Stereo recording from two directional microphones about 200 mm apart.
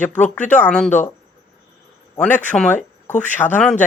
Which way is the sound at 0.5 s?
5° left (ahead or behind).